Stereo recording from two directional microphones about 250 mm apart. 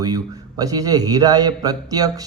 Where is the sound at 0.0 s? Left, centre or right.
Centre.